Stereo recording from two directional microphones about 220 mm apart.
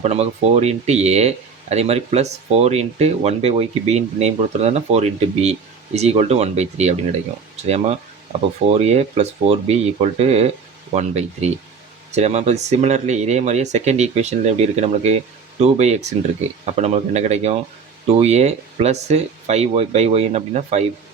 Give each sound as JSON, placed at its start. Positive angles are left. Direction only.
{"t": 0.0, "sound": "speech", "side_deg": -30}